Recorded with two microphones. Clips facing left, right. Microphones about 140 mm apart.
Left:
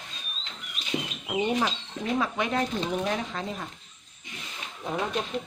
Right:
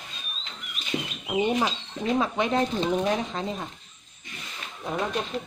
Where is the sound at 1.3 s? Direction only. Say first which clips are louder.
Right 2 dB; 10° right (ahead or behind).